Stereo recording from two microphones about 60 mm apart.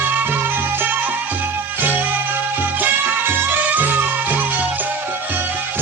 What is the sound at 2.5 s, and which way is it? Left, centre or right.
Music, right.